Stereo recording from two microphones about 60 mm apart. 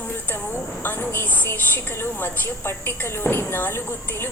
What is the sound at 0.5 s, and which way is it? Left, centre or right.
A woman's voice, left.